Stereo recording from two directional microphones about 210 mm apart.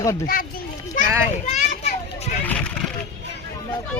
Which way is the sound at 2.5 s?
5° left (ahead or behind).